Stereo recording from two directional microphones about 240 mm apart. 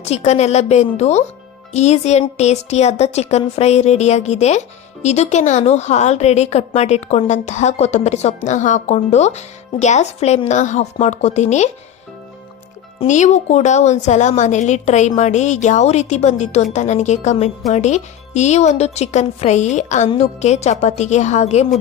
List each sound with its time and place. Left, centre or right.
0.0 s speech: left
13.0 s speech: left